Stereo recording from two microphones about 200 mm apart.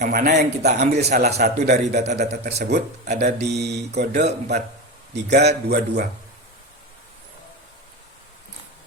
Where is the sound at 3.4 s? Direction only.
55° right (ahead or behind).